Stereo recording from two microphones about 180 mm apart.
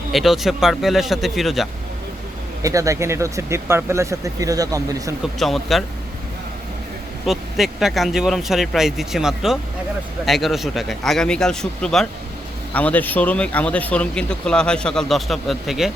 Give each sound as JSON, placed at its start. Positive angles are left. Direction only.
{"t": 0.1, "sound": "speech", "side_deg": 0}
{"t": 2.6, "sound": "speech", "side_deg": -15}
{"t": 5.4, "sound": "speech", "side_deg": 0}
{"t": 7.3, "sound": "speech", "side_deg": 0}